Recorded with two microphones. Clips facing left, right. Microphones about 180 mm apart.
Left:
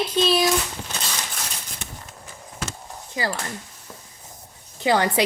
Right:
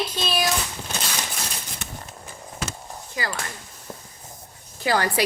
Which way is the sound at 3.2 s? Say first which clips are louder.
Left 4 dB; 25° left (ahead or behind).